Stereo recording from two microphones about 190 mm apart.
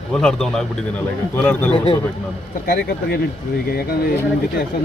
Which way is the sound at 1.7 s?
30° left (ahead or behind).